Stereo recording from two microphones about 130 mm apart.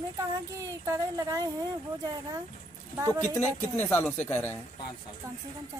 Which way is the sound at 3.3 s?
15° left (ahead or behind).